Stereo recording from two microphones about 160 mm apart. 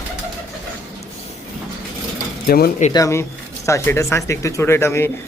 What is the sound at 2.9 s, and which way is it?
A man's voice, 20° left (ahead or behind).